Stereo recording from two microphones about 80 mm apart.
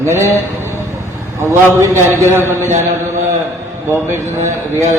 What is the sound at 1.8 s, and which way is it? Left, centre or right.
Speech, right.